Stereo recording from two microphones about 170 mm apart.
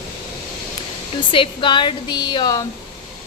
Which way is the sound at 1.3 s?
30° left (ahead or behind).